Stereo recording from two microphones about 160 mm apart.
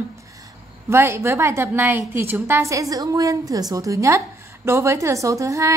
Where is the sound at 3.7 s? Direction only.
20° right (ahead or behind).